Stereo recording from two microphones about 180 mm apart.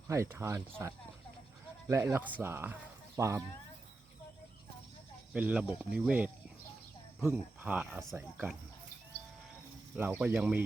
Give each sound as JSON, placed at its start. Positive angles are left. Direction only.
{"t": 0.1, "sound": "speech", "side_deg": -15}
{"t": 1.9, "sound": "speech", "side_deg": -15}
{"t": 5.3, "sound": "speech", "side_deg": -5}
{"t": 9.9, "sound": "speech", "side_deg": -10}